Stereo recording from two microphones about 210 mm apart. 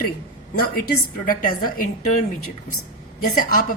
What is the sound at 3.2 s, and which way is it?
Speech, 45° left (ahead or behind).